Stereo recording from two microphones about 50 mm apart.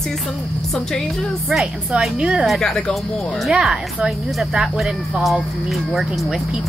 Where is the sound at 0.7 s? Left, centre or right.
Centre.